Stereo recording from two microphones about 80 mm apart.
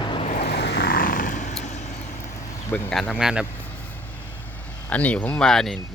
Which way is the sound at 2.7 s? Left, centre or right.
Left.